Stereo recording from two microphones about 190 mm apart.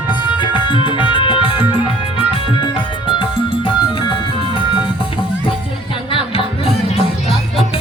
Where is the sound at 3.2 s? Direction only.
25° left (ahead or behind).